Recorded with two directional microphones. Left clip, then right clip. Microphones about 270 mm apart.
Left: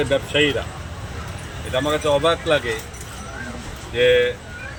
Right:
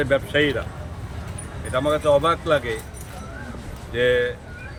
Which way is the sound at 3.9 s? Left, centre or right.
Centre.